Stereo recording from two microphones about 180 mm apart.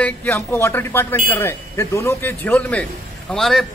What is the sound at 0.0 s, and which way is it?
A man's voice, 10° left (ahead or behind).